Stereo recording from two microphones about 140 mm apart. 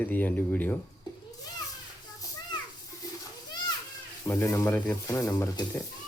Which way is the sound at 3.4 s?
30° left (ahead or behind).